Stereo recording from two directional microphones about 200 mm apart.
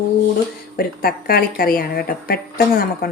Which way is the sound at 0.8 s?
50° left (ahead or behind).